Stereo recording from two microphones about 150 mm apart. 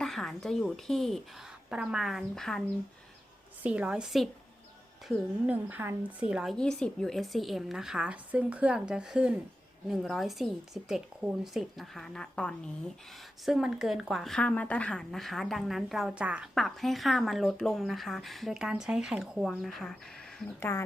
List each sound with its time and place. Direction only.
0.0 s a woman's voice: centre (ahead or behind)
3.6 s a woman's voice: 10° right (ahead or behind)
20.6 s speech: 15° left (ahead or behind)